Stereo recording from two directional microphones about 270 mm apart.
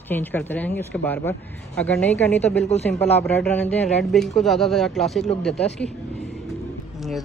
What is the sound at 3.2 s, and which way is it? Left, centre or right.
A man's voice, centre.